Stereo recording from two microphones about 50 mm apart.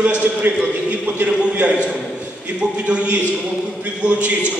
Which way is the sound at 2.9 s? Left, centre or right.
Right.